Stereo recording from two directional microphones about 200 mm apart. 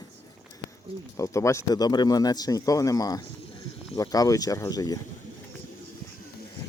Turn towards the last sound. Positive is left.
turn(degrees=20)  # may be behind; listen again after turning